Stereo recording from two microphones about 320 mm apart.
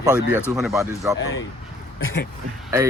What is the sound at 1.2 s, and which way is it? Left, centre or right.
Speech, left.